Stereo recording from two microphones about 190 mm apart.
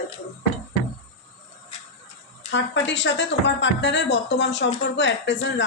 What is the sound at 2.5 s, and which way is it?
Speech, 70° left (ahead or behind).